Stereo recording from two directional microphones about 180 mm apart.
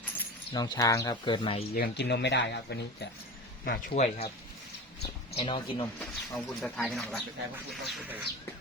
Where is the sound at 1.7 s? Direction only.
65° left (ahead or behind).